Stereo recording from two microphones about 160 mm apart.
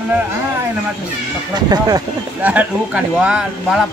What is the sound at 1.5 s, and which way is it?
Speech, 25° right (ahead or behind).